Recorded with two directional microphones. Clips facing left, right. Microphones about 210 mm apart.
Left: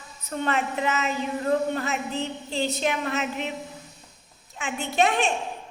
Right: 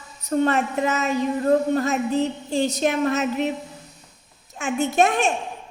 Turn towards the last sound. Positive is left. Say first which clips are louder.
# right 4 dB
turn(degrees=-45)  # may be behind; listen again after turning